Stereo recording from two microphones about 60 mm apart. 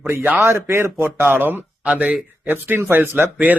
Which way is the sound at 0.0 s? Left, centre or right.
Right.